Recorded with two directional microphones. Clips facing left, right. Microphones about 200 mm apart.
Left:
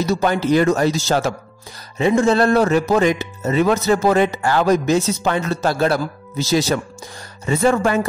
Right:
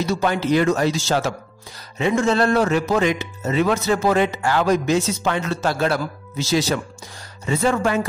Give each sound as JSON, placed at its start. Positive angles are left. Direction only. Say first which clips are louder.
{"t": 0.0, "sound": "speech", "louder": "left 3 dB", "side_deg": 40}